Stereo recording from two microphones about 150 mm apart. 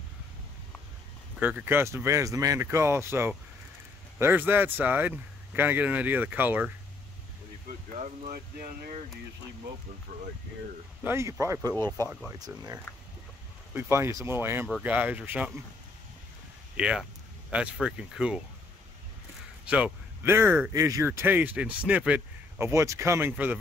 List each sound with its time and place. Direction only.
1.4 s speech: 10° right (ahead or behind)
11.1 s speech: 20° right (ahead or behind)
11.7 s speech: 15° left (ahead or behind)
12.4 s speech: 25° right (ahead or behind); by 15.5 s 10° right (ahead or behind)
16.7 s speech: 5° right (ahead or behind)
19.6 s speech: 10° right (ahead or behind)
20.7 s speech: 20° right (ahead or behind)